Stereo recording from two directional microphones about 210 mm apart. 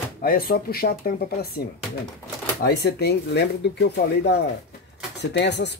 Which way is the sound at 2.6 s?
50° left (ahead or behind).